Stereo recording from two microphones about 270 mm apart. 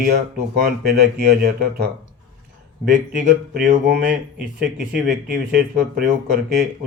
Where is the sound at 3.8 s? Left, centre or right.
Right.